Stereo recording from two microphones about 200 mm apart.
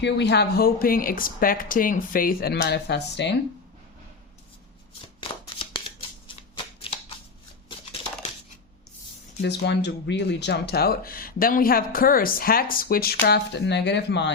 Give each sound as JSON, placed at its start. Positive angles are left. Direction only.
{"t": 0.0, "sound": "speech", "side_deg": 60}
{"t": 5.5, "sound": "a sound", "side_deg": 25}
{"t": 6.7, "sound": "shuffling cards", "side_deg": 30}
{"t": 9.4, "sound": "speech", "side_deg": 60}